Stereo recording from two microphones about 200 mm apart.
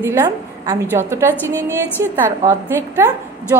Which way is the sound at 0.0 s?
10° right (ahead or behind).